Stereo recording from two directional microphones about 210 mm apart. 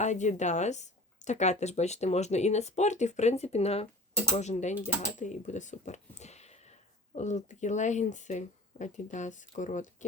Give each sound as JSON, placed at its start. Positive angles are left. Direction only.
{"t": 0.0, "sound": "speech", "side_deg": 35}